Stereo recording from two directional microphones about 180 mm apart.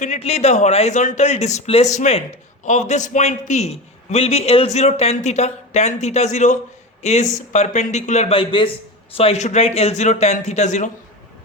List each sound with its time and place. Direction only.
0.0 s a man's voice: 40° left (ahead or behind)